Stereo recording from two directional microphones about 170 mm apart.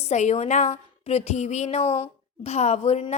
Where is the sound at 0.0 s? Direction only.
45° left (ahead or behind).